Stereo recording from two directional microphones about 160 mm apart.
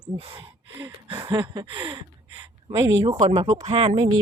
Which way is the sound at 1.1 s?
30° right (ahead or behind).